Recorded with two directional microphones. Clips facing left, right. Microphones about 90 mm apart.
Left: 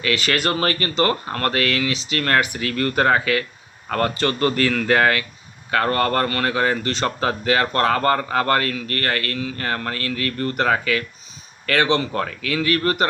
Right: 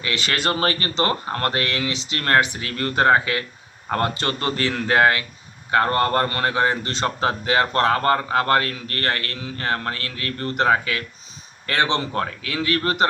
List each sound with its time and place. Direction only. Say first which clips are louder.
0.0 s speech: left 3 dB; 25° right (ahead or behind)
11.6 s speech: left 3 dB; 30° right (ahead or behind)
12.1 s speech: left 2 dB; 15° right (ahead or behind)